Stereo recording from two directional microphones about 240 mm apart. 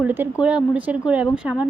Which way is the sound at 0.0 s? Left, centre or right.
Centre.